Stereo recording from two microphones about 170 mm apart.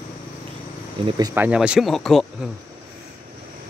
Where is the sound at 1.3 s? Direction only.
10° right (ahead or behind).